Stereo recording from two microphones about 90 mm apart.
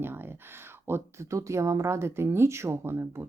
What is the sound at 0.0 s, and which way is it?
Speech, 25° right (ahead or behind).